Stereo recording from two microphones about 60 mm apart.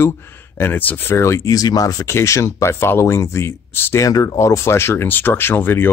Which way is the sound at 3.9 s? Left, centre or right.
Left.